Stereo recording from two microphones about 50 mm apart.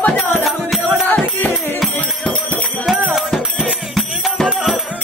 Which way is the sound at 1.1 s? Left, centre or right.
Left.